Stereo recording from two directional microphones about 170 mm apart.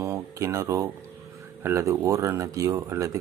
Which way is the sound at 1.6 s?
15° right (ahead or behind).